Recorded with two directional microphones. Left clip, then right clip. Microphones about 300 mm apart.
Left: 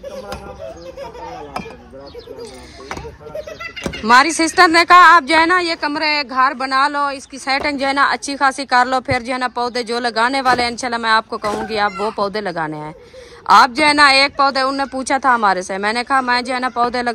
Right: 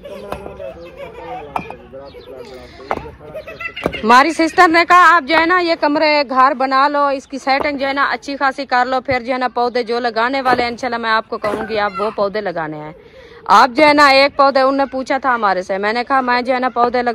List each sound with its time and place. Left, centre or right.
4.0 s speech: centre